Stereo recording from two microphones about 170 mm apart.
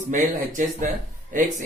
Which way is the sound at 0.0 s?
50° right (ahead or behind).